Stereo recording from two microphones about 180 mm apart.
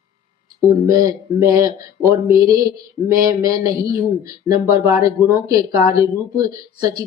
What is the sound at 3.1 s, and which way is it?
A man's voice, 20° right (ahead or behind).